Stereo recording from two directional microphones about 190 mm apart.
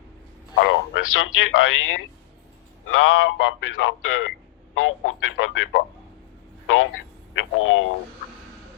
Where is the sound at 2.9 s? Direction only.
85° left.